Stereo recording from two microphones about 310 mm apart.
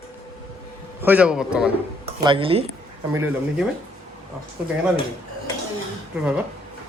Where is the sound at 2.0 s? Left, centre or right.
Centre.